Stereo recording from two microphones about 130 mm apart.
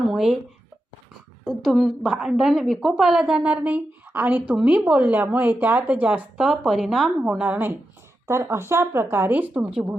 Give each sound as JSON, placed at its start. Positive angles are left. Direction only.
{"t": 0.0, "sound": "speech", "side_deg": -5}
{"t": 1.5, "sound": "a woman's voice", "side_deg": 0}